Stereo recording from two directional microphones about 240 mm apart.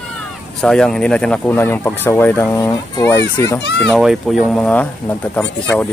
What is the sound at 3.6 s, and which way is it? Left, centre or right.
Speech, left.